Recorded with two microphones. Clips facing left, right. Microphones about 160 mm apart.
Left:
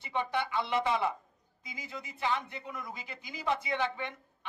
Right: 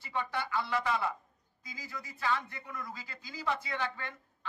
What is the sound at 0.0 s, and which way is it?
A man's voice, 20° left (ahead or behind).